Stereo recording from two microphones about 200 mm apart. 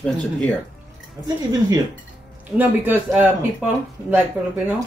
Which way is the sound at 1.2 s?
20° right (ahead or behind).